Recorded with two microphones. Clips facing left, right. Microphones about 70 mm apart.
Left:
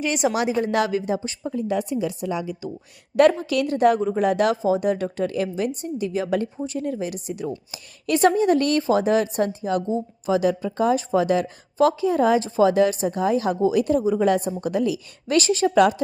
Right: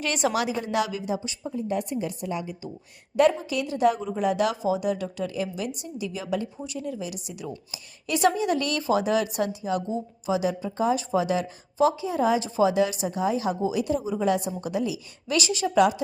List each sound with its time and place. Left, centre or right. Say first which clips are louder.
0.0 s a woman's voice: left 3 dB; centre
0.6 s a woman's voice: left 5 dB; left
1.5 s a woman's voice: left 4 dB; left
3.2 s a woman's voice: left 4 dB; left